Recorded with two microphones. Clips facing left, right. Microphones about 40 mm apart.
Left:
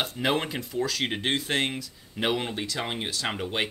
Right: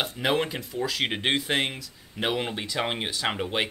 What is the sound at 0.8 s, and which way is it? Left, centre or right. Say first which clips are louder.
Speech: right 4 dB; centre.